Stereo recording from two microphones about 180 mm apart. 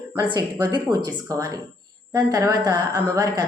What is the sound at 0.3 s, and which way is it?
A woman's voice, 25° right (ahead or behind).